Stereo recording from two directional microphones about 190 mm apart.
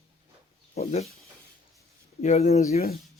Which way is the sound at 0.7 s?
35° left (ahead or behind).